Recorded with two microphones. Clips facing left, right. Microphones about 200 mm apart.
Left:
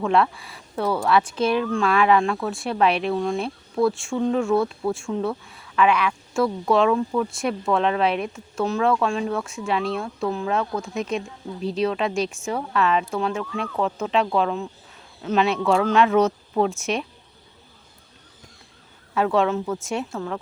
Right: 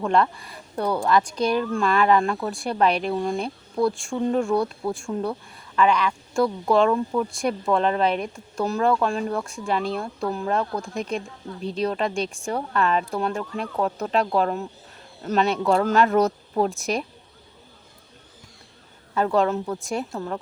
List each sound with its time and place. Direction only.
0.0 s speech: 5° left (ahead or behind)
19.1 s speech: centre (ahead or behind)
20.1 s a woman's voice: 15° right (ahead or behind)